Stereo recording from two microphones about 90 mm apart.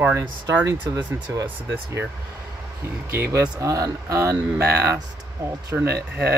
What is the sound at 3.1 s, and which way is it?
Speech, 30° right (ahead or behind).